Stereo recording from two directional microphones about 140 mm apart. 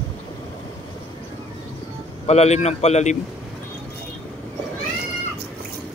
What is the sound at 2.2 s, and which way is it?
Speech, 50° left (ahead or behind).